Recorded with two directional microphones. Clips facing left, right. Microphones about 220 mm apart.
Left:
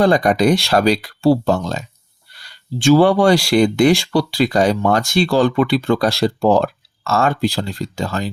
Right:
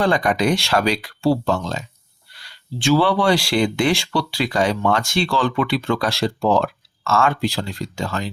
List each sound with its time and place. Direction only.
0.0 s speech: 40° left (ahead or behind)